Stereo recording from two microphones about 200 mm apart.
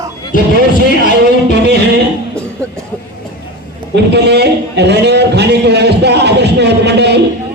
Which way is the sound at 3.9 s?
60° right (ahead or behind).